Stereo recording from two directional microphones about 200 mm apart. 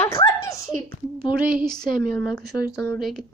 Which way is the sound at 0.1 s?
15° left (ahead or behind).